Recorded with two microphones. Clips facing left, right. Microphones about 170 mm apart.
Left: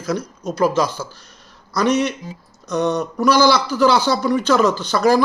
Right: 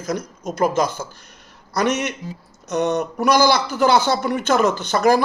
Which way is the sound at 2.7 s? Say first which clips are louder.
Left 1 dB; 60° right (ahead or behind).